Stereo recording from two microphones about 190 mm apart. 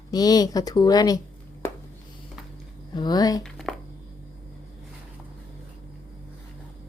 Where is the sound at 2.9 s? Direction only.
20° left (ahead or behind).